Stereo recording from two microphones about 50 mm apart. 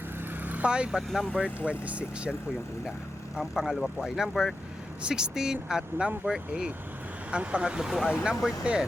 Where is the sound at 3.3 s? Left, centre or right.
Centre.